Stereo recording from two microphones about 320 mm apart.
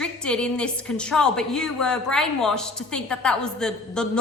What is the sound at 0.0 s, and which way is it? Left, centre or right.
A woman's voice, centre.